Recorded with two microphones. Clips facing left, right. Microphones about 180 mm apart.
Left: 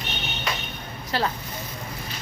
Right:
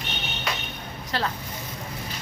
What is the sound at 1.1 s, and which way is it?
Speech, 5° left (ahead or behind).